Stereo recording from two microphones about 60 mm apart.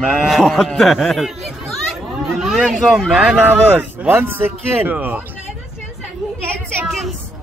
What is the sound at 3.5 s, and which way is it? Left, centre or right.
Speech, right.